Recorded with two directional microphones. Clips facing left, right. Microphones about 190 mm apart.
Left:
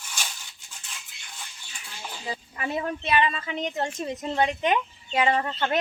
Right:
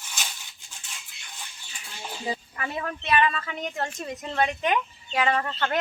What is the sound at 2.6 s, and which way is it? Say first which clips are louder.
A woman's voice: left 3 dB; 25° left (ahead or behind).